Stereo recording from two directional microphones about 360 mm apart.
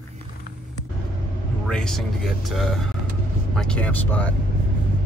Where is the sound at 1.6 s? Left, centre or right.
Centre.